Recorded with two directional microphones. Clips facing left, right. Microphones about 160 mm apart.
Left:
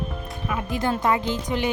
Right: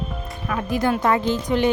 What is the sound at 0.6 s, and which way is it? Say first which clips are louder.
Speech: right 4 dB; 20° left (ahead or behind).